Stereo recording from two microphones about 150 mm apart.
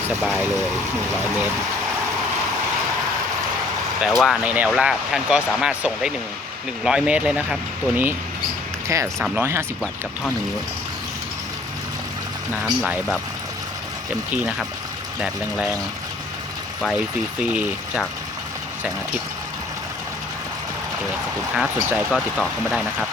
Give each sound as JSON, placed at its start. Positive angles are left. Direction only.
{"t": 4.0, "sound": "speech", "side_deg": 0}
{"t": 9.1, "sound": "speech", "side_deg": -5}
{"t": 9.4, "sound": "speech", "side_deg": -15}
{"t": 12.6, "sound": "speech", "side_deg": -5}
{"t": 15.2, "sound": "speech", "side_deg": -5}
{"t": 17.4, "sound": "speech", "side_deg": -5}
{"t": 21.5, "sound": "speech", "side_deg": -5}